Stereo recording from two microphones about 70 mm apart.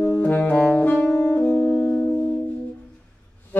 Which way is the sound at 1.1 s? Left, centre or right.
Left.